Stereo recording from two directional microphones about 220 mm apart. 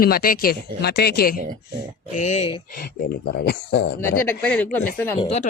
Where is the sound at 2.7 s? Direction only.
45° left (ahead or behind).